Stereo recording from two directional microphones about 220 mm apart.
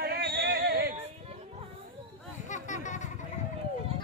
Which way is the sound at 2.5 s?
35° left (ahead or behind).